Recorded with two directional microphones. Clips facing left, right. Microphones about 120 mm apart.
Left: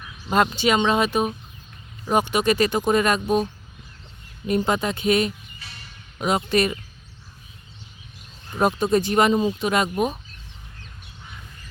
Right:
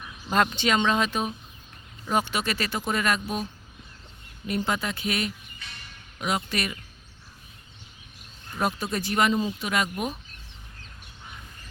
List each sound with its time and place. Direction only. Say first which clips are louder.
0.5 s speech: left 4 dB; 10° left (ahead or behind)
4.4 s speech: left 6 dB; 25° left (ahead or behind)
8.4 s speech: left 8 dB; 25° left (ahead or behind)